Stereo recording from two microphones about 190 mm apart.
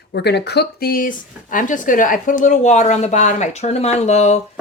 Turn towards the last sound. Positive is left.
turn(degrees=35)  # may be behind; listen again after turning